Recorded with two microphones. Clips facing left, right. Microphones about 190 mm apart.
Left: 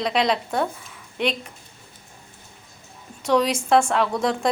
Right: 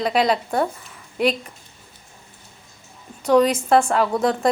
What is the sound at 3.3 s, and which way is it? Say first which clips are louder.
A woman's voice: right 3 dB; centre (ahead or behind).